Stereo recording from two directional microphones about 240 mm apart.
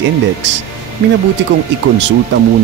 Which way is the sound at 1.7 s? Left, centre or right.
Right.